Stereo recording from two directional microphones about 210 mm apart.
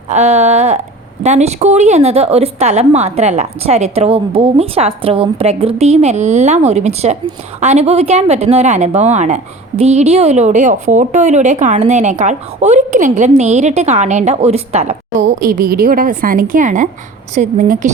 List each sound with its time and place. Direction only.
0.1 s speech: 30° right (ahead or behind)
15.4 s speech: 40° right (ahead or behind)